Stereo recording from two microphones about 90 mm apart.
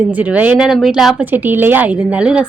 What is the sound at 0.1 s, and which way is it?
Speech, 15° right (ahead or behind).